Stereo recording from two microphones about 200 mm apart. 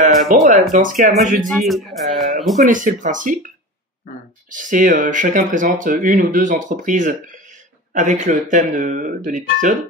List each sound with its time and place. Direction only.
0.3 s speech: 40° right (ahead or behind)
1.4 s speech: centre (ahead or behind)
2.6 s speech: 40° right (ahead or behind)
4.5 s speech: 40° right (ahead or behind)